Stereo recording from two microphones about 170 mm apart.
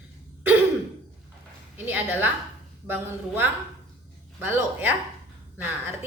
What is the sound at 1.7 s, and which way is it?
Speech, 10° right (ahead or behind).